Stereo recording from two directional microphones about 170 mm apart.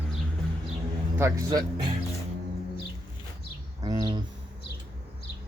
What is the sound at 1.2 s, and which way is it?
Speech, 15° right (ahead or behind).